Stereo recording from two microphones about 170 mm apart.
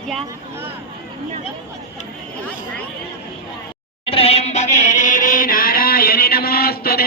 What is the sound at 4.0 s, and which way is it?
Music, 35° left (ahead or behind).